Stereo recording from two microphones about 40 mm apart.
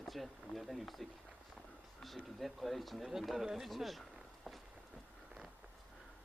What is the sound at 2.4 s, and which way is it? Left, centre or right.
Speech, centre.